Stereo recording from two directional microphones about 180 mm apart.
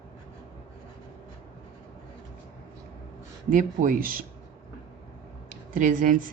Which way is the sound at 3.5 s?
50° right (ahead or behind).